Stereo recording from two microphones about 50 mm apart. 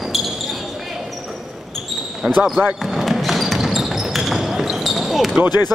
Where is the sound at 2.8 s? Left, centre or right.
Centre.